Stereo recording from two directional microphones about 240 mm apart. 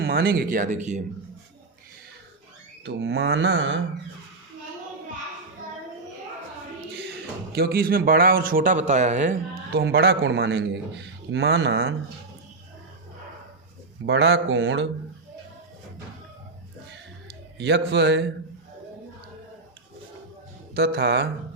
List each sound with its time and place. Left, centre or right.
0.0 s speech: right
2.8 s speech: right
7.5 s speech: right
9.8 s speech: right
14.1 s speech: right
17.6 s speech: right
20.7 s speech: right